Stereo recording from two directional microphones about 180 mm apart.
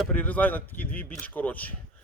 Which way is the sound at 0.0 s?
10° left (ahead or behind).